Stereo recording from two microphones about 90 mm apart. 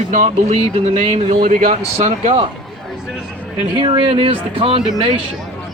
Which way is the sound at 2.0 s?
85° right.